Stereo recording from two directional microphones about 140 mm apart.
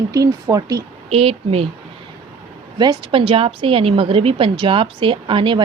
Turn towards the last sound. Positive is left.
turn(degrees=-35)  # may be behind; listen again after turning